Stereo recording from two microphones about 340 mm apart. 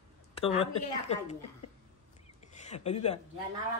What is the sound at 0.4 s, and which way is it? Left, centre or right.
Speech, centre.